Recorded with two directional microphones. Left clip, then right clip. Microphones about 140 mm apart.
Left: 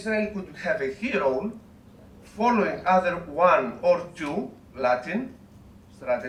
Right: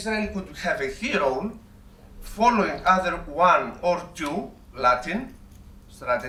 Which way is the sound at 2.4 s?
35° right (ahead or behind).